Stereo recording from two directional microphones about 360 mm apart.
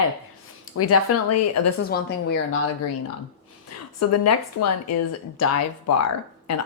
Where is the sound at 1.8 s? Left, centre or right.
Left.